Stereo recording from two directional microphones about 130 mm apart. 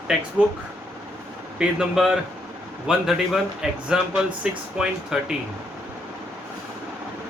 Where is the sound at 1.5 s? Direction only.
5° right (ahead or behind).